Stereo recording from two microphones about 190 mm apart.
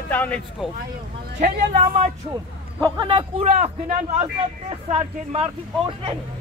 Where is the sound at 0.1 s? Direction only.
10° left (ahead or behind).